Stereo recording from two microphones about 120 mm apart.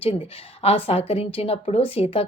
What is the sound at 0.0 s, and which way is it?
A woman's voice, 50° left (ahead or behind).